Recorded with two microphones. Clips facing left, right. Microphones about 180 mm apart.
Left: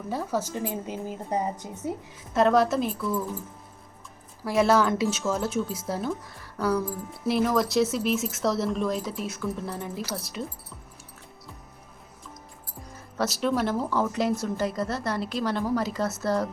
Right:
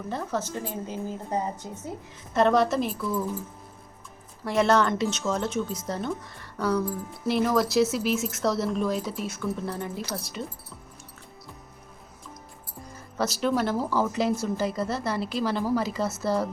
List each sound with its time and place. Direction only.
0.1 s a woman's voice: 5° left (ahead or behind)
2.3 s speech: centre (ahead or behind)
4.4 s speech: 5° left (ahead or behind)
12.9 s speech: centre (ahead or behind)